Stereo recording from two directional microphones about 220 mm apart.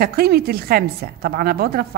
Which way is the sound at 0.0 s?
45° right (ahead or behind).